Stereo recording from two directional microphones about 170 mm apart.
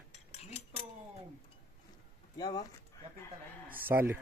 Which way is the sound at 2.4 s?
25° left (ahead or behind).